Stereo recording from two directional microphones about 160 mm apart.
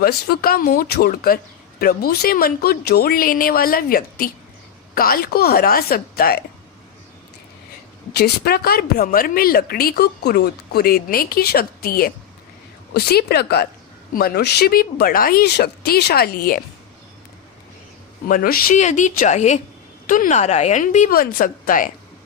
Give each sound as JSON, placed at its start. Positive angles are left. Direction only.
{"t": 0.0, "sound": "a woman's voice", "side_deg": 75}
{"t": 8.1, "sound": "a woman's voice", "side_deg": 80}
{"t": 12.9, "sound": "a woman's voice", "side_deg": 85}
{"t": 14.1, "sound": "a woman's voice", "side_deg": 70}
{"t": 18.3, "sound": "a woman's voice", "side_deg": 65}
{"t": 18.8, "sound": "speech", "side_deg": 50}
{"t": 21.1, "sound": "a woman's voice", "side_deg": 65}